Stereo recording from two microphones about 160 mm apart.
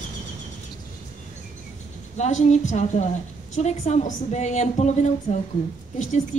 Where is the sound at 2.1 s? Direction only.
45° left (ahead or behind).